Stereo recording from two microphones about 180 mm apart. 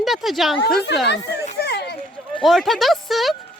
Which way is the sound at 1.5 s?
65° left (ahead or behind).